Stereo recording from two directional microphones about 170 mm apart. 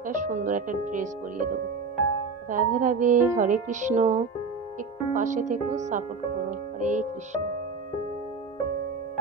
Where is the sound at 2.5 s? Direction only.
50° right (ahead or behind).